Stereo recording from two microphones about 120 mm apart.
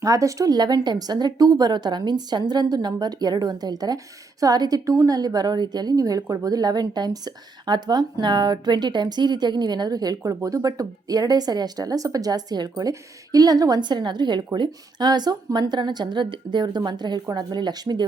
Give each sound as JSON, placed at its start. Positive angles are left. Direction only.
{"t": 0.0, "sound": "speech", "side_deg": -25}